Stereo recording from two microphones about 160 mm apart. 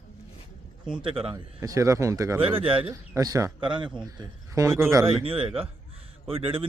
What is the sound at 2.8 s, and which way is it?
Speech, 20° right (ahead or behind).